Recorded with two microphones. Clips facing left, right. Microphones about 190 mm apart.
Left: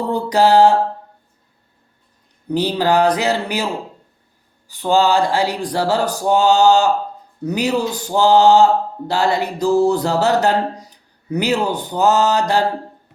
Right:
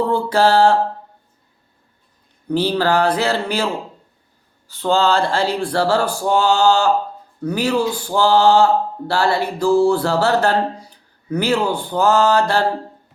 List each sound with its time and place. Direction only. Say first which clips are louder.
0.3 s speech: left 3 dB; 15° left (ahead or behind)
2.5 s speech: even; 15° left (ahead or behind)
4.7 s speech: left 1 dB; 15° left (ahead or behind)